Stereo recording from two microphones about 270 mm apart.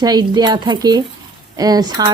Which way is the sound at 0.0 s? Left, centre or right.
Centre.